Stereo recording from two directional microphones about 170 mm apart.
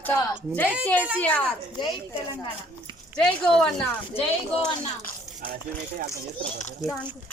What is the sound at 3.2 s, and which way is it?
Speech, 5° left (ahead or behind).